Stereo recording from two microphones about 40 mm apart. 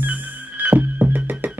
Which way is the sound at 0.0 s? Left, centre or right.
Right.